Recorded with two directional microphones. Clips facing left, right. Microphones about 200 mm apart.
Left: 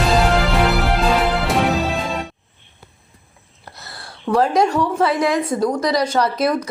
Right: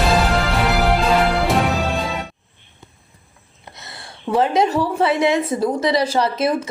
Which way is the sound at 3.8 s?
Centre (ahead or behind).